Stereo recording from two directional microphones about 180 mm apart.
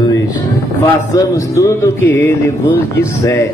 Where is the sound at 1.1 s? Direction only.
15° left (ahead or behind).